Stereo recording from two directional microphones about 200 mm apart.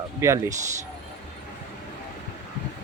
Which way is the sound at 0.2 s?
15° right (ahead or behind).